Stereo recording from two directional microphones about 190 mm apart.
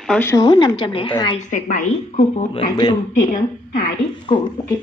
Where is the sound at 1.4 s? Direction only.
45° left (ahead or behind).